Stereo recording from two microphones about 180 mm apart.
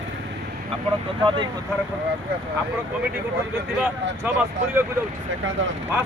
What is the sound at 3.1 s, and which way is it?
Speech, 10° right (ahead or behind).